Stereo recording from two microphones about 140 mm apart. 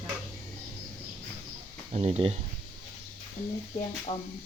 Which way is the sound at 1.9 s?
45° right (ahead or behind).